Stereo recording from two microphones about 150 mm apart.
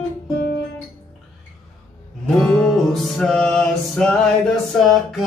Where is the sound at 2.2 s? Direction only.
5° left (ahead or behind).